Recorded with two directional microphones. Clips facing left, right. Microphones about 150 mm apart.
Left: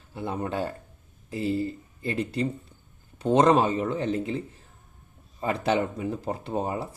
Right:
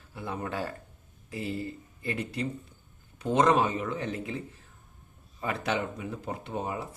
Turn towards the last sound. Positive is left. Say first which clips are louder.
# left 5 dB
turn(degrees=35)  # may be behind; listen again after turning